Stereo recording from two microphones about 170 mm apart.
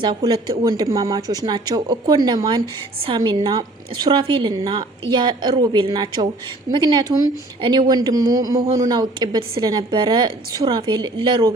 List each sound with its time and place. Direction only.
0.0 s speech: 25° right (ahead or behind)